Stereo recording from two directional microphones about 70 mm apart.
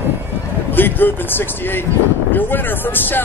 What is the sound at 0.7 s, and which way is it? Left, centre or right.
Speech, left.